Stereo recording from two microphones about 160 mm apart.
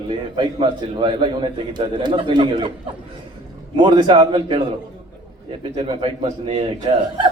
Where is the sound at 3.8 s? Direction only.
30° right (ahead or behind).